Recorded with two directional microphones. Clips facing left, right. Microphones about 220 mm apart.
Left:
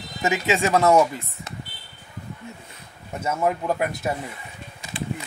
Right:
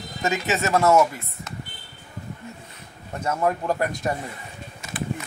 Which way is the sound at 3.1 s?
5° left (ahead or behind).